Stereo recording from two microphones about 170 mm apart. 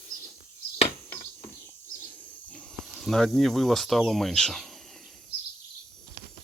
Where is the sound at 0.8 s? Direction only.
35° left (ahead or behind).